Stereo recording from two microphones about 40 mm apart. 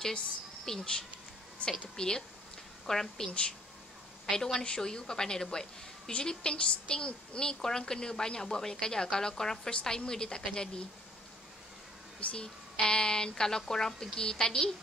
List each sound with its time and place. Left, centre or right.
0.7 s a woman's voice: centre
1.6 s a woman's voice: left
2.0 s a woman's voice: centre
4.3 s a woman's voice: centre
12.2 s a woman's voice: left
12.7 s a woman's voice: centre